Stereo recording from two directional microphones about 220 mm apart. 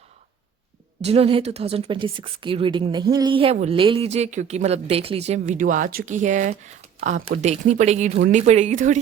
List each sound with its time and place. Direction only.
1.0 s a woman's voice: 25° right (ahead or behind)